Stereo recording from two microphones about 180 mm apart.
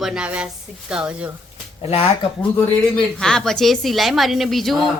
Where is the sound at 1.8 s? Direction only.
35° left (ahead or behind).